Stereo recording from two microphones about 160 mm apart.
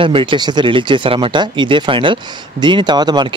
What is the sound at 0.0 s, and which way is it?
Speech, 35° right (ahead or behind).